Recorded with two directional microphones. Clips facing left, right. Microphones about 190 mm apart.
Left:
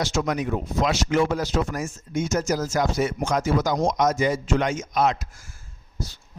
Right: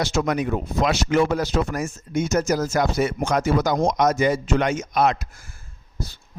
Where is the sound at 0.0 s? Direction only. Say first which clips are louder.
Right 2 dB; 60° right (ahead or behind).